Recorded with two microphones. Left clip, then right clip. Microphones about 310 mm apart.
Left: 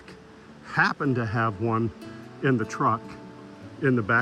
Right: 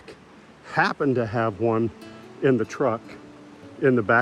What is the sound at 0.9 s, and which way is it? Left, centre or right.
Speech, right.